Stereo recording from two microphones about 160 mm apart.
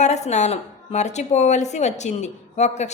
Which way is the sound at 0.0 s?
45° left (ahead or behind).